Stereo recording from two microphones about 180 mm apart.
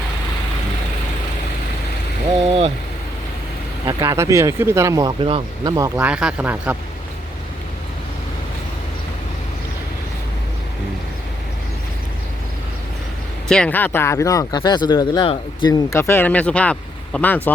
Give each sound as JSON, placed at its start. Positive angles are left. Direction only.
{"t": 2.5, "sound": "vehicle", "side_deg": -35}
{"t": 4.0, "sound": "speech", "side_deg": -15}
{"t": 5.2, "sound": "speech", "side_deg": -30}
{"t": 5.7, "sound": "speech", "side_deg": -20}
{"t": 6.1, "sound": "speech", "side_deg": -5}
{"t": 13.5, "sound": "speech", "side_deg": 5}